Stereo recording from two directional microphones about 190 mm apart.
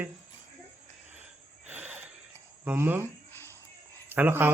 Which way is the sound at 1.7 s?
10° right (ahead or behind).